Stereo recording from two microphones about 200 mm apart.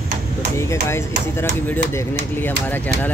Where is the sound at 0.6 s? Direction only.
15° left (ahead or behind).